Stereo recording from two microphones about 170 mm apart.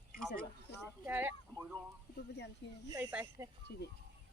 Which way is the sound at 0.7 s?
80° left.